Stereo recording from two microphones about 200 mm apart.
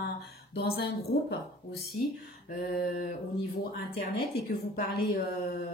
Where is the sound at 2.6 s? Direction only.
50° left (ahead or behind).